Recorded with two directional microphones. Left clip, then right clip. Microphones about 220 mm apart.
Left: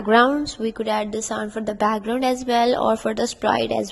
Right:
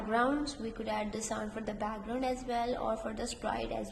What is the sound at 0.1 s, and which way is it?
A woman's voice, 40° left (ahead or behind).